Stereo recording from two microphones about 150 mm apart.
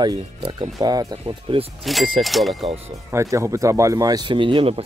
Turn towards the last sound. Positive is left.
turn(degrees=-35)  # may be behind; listen again after turning